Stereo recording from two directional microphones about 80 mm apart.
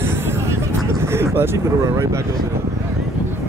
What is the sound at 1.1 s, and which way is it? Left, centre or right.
Speech, right.